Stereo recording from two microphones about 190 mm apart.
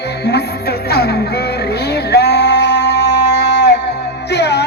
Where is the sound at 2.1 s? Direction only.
60° left (ahead or behind).